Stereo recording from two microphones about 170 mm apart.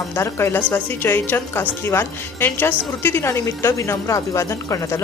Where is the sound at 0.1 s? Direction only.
15° left (ahead or behind).